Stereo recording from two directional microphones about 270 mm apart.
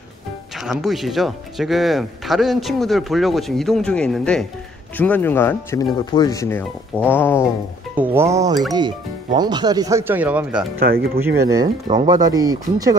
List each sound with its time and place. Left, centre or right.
0.6 s speech: centre
7.9 s speech: centre
10.8 s speech: right
11.4 s speech: centre